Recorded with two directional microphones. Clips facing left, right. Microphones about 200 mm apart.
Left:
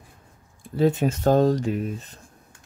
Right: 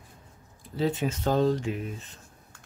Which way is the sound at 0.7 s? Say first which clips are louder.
Left 6 dB; 45° left (ahead or behind).